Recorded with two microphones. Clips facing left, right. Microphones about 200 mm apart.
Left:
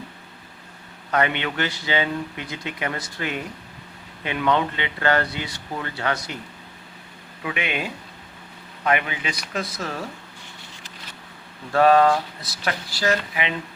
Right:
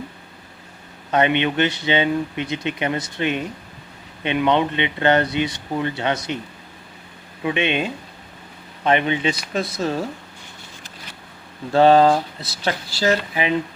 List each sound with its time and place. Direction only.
1.1 s speech: 20° right (ahead or behind)
7.4 s speech: 25° right (ahead or behind)
11.7 s speech: 30° right (ahead or behind)